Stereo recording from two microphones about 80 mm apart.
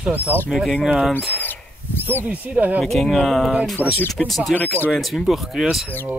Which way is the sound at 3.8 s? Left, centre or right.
Right.